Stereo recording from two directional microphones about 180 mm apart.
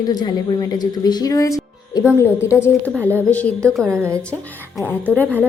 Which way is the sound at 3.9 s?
15° right (ahead or behind).